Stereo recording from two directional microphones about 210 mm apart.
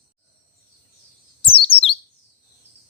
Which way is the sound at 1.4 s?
25° left (ahead or behind).